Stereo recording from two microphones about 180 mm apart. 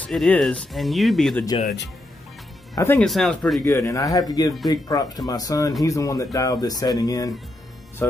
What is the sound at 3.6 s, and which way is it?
Speech, 15° left (ahead or behind).